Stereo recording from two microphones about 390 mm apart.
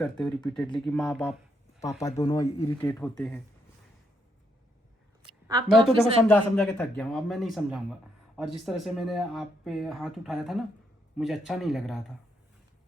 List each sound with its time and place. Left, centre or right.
0.0 s speech: centre
5.5 s speech: centre